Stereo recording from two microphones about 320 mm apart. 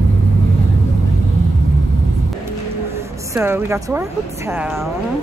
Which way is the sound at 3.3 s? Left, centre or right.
Centre.